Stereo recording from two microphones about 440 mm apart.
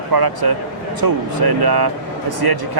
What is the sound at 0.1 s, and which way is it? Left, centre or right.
Speech, right.